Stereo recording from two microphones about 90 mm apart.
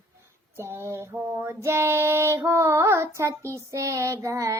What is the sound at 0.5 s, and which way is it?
Child singing, 30° right (ahead or behind).